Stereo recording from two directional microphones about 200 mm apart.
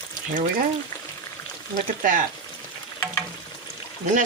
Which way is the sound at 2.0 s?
45° right (ahead or behind).